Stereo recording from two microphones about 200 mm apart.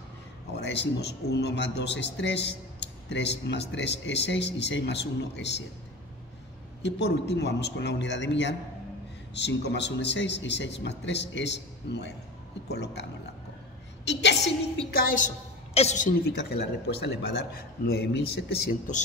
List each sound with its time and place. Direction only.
0.5 s a man's voice: 55° left (ahead or behind)
6.8 s a man's voice: 60° left (ahead or behind)
14.0 s a sound: 60° left (ahead or behind)
14.9 s a woman's voice: 45° left (ahead or behind)
16.3 s a man's voice: 55° left (ahead or behind)